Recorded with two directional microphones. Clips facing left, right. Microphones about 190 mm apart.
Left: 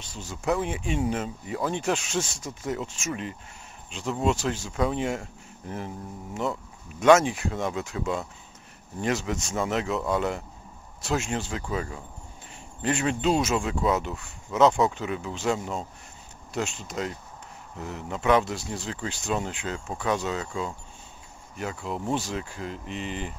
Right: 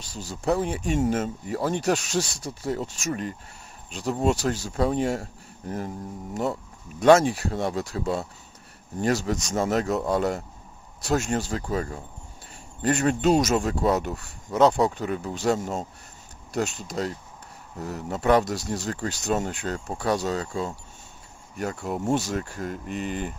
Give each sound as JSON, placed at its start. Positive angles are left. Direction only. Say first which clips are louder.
{"t": 0.0, "sound": "speech", "louder": "right 2 dB", "side_deg": -35}